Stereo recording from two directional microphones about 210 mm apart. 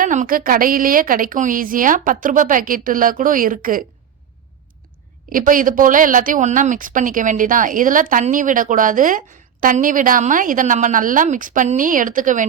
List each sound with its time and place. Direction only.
0.0 s a woman's voice: 40° right (ahead or behind)
5.3 s a woman's voice: 40° right (ahead or behind)